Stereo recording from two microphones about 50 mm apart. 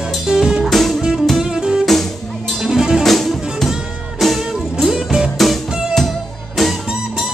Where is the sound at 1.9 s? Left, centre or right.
Centre.